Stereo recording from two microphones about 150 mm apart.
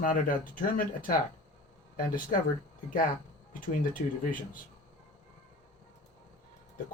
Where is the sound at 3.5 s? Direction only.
65° left (ahead or behind).